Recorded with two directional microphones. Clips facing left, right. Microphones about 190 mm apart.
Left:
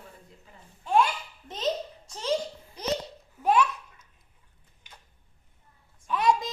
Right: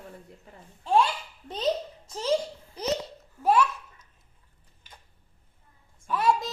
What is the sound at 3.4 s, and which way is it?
Babbling, 15° left (ahead or behind).